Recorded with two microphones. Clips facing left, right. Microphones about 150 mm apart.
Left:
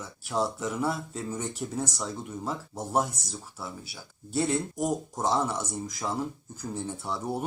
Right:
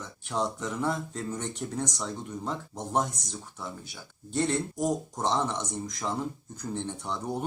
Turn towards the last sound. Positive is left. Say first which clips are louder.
# left 1 dB
turn(degrees=5)  # may be behind; listen again after turning